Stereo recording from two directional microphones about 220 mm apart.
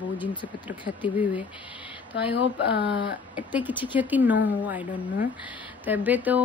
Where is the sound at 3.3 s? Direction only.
5° right (ahead or behind).